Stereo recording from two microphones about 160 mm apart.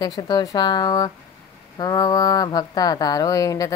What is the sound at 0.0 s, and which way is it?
Speech, 25° left (ahead or behind).